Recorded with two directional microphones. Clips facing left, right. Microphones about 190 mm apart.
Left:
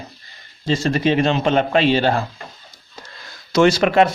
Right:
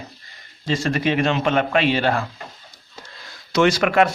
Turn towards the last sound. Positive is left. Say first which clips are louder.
# left 3 dB
turn(degrees=25)  # may be behind; listen again after turning